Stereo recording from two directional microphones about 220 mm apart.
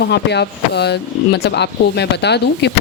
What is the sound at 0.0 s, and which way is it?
Speech, 50° left (ahead or behind).